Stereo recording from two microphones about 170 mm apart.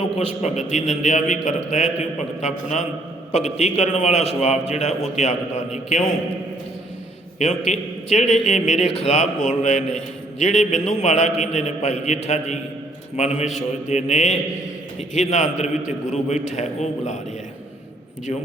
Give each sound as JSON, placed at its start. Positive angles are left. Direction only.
{"t": 0.4, "sound": "a man's voice", "side_deg": 45}
{"t": 7.7, "sound": "a man's voice", "side_deg": 40}